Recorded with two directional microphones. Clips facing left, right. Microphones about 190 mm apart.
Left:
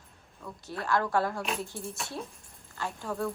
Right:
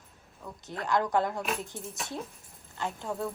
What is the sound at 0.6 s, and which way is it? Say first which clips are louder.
A woman's voice: right 1 dB; 20° right (ahead or behind).